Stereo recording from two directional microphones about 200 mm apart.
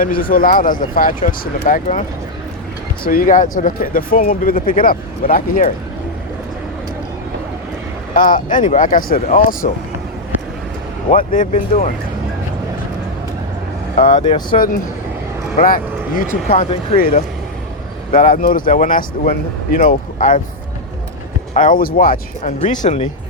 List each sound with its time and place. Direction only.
0.0 s a man's voice: 45° left (ahead or behind)
3.1 s a man's voice: 45° left (ahead or behind)
8.1 s speech: 40° left (ahead or behind)
11.1 s speech: 40° left (ahead or behind)
14.1 s speech: 25° left (ahead or behind)
14.5 s a man's voice: 45° left (ahead or behind)
16.3 s speech: 35° left (ahead or behind)
18.1 s a man's voice: 45° left (ahead or behind)
21.5 s a man's voice: 40° left (ahead or behind)
22.6 s speech: 35° left (ahead or behind)